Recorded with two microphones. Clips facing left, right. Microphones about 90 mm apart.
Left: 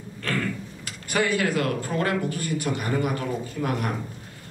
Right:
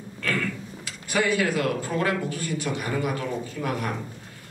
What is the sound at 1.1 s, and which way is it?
A man's voice, 50° left (ahead or behind).